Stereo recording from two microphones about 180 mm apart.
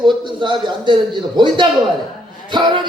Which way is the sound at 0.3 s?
25° right (ahead or behind).